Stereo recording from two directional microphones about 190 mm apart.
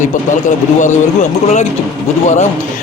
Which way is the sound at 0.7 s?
40° left (ahead or behind).